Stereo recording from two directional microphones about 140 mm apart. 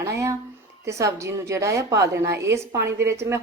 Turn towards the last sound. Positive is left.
turn(degrees=-20)  # may be behind; listen again after turning